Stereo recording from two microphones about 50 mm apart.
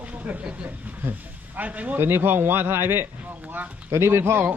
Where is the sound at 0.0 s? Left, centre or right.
Right.